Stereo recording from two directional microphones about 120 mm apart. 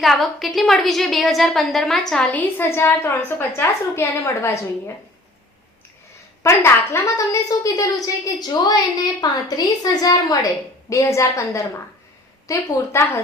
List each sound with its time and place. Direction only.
0.0 s a woman's voice: centre (ahead or behind); by 4.5 s 20° left (ahead or behind)
6.4 s a woman's voice: 20° left (ahead or behind)